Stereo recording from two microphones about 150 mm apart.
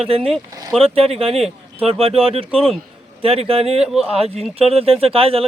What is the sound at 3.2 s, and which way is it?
Speech, 40° right (ahead or behind).